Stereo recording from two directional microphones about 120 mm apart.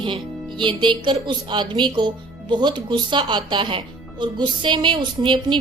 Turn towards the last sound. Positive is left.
turn(degrees=-40)  # may be behind; listen again after turning